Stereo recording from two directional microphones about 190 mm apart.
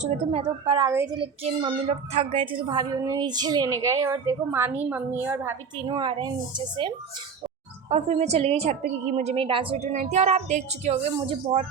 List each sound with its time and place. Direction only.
0.0 s a woman's voice: 35° right (ahead or behind)
0.9 s a woman's voice: 15° right (ahead or behind)
1.2 s speech: 30° right (ahead or behind)
7.9 s a woman's voice: 35° right (ahead or behind)